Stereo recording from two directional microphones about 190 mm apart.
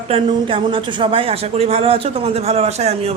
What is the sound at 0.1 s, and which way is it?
Speech, 25° right (ahead or behind).